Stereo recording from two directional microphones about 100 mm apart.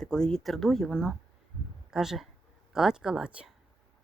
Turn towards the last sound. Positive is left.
turn(degrees=-10)  # may be behind; listen again after turning